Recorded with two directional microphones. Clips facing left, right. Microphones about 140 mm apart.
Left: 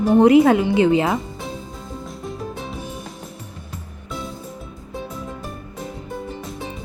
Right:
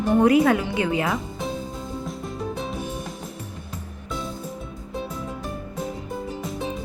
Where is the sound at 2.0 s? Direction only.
Centre (ahead or behind).